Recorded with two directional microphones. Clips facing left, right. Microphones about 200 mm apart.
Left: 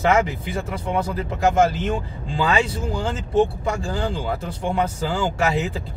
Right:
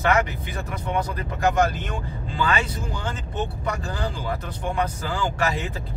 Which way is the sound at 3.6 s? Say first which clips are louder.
Left 4 dB; 25° left (ahead or behind).